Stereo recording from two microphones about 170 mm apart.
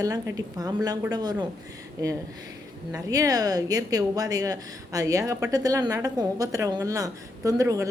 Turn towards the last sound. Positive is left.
turn(degrees=-20)  # may be behind; listen again after turning